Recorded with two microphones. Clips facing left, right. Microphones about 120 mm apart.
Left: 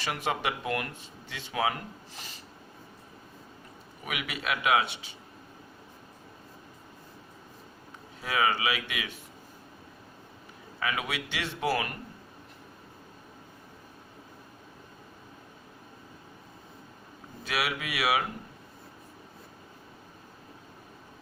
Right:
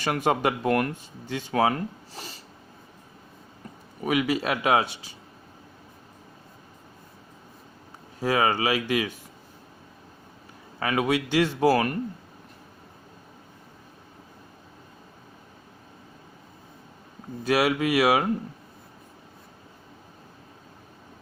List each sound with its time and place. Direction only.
0.0 s speech: 45° right (ahead or behind)
4.0 s speech: 35° right (ahead or behind)
8.2 s speech: 35° right (ahead or behind)
10.8 s speech: 40° right (ahead or behind)
17.4 s speech: 40° right (ahead or behind)